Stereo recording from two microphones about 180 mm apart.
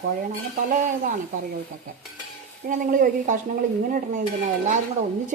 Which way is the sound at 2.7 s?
45° right (ahead or behind).